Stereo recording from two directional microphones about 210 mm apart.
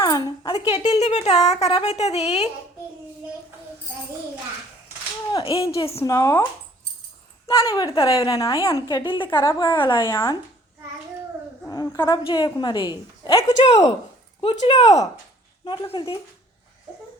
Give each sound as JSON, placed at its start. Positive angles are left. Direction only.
{"t": 0.0, "sound": "a sound", "side_deg": 15}
{"t": 0.6, "sound": "speech", "side_deg": 25}
{"t": 5.3, "sound": "speech", "side_deg": 25}
{"t": 6.0, "sound": "a woman's voice", "side_deg": 15}
{"t": 7.4, "sound": "a woman's voice", "side_deg": 15}
{"t": 11.7, "sound": "a sound", "side_deg": 15}
{"t": 12.2, "sound": "speech", "side_deg": 20}
{"t": 13.7, "sound": "speech", "side_deg": 30}